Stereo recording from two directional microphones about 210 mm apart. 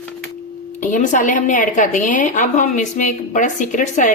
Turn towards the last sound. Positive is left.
turn(degrees=35)  # may be behind; listen again after turning